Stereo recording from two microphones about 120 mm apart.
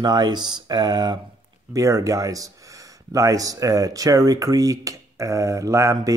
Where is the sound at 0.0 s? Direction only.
35° right (ahead or behind).